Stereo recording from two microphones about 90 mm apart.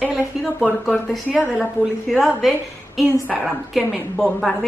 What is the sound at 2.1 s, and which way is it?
A woman's voice, centre (ahead or behind).